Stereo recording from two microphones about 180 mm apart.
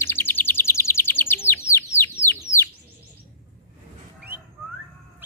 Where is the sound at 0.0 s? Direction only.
10° left (ahead or behind).